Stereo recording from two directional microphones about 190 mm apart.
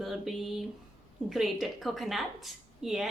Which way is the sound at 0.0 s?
Centre (ahead or behind).